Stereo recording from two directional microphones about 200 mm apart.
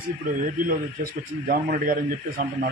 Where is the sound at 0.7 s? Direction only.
45° right (ahead or behind).